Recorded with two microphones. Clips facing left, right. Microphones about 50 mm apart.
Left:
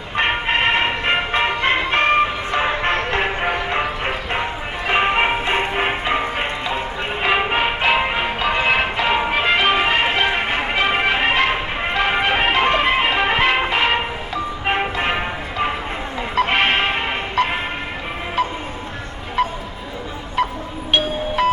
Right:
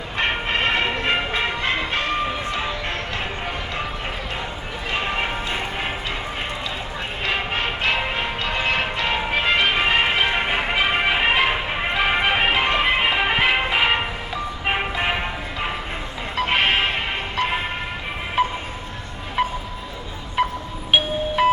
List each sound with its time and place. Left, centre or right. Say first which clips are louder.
0.2 s music: left 4 dB; left
7.2 s music: left 6 dB; centre
18.4 s music: right 1 dB; centre